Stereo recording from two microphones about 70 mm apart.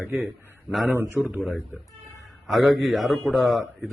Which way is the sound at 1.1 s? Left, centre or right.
Centre.